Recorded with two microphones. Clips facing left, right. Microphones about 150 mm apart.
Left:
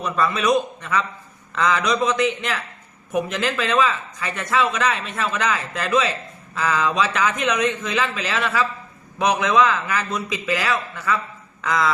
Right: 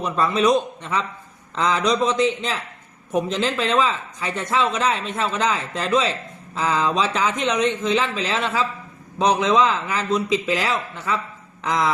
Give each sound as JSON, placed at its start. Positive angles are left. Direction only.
{"t": 0.0, "sound": "speech", "side_deg": -25}